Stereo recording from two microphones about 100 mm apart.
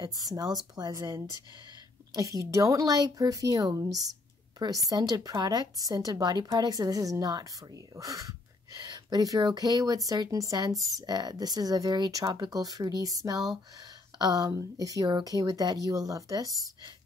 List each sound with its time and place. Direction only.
0.0 s speech: 40° right (ahead or behind)
2.1 s speech: 30° right (ahead or behind)